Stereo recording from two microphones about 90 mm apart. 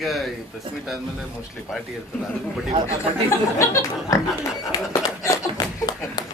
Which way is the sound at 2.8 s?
35° left (ahead or behind).